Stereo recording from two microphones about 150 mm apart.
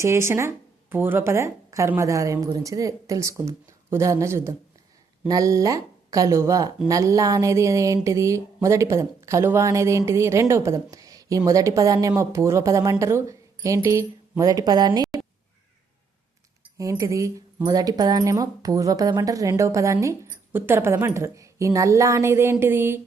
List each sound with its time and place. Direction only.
0.0 s a woman's voice: 20° right (ahead or behind)
16.7 s speech: 20° right (ahead or behind)